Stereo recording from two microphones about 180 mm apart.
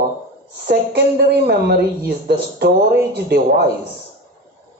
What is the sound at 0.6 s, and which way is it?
A man's voice, 65° right (ahead or behind).